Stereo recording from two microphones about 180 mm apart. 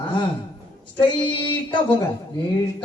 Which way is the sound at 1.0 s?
25° left (ahead or behind).